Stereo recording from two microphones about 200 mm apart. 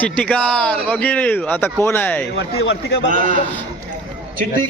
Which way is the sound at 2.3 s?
65° left (ahead or behind).